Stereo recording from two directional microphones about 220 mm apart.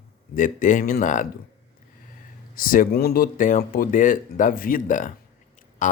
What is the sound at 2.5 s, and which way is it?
Speech, 40° left (ahead or behind).